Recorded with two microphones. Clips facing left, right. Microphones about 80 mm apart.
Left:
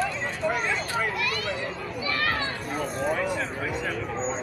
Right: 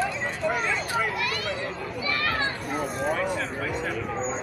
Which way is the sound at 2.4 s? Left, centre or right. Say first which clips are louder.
Right 2 dB; right.